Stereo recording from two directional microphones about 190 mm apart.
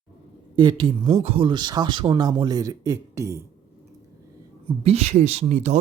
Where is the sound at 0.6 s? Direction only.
25° right (ahead or behind).